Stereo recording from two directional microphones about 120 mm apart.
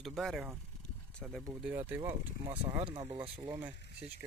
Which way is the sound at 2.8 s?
45° right (ahead or behind).